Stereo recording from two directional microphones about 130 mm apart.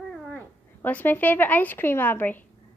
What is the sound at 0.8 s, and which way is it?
A woman's voice, 15° left (ahead or behind).